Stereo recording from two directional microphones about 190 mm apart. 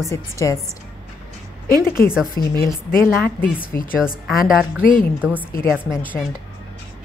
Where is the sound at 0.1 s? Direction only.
15° left (ahead or behind).